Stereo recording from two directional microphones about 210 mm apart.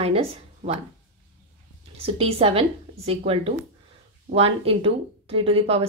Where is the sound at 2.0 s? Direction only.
25° right (ahead or behind).